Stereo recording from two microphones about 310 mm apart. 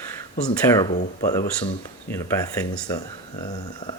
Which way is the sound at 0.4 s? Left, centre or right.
Centre.